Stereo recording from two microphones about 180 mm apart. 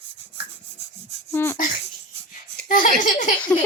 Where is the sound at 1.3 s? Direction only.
15° left (ahead or behind).